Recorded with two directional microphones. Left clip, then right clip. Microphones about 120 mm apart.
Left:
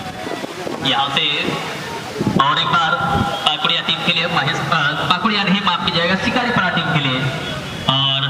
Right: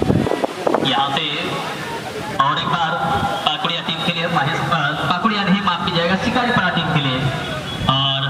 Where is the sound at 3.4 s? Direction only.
10° left (ahead or behind).